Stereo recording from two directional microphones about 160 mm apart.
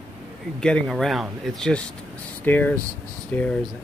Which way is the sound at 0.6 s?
5° left (ahead or behind).